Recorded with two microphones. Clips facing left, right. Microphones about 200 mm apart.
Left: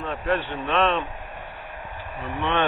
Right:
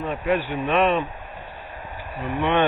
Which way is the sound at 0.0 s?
10° right (ahead or behind).